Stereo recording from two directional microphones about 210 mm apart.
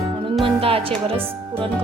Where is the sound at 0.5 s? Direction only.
25° right (ahead or behind).